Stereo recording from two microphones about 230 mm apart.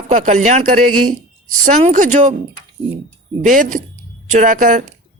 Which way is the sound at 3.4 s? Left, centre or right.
Right.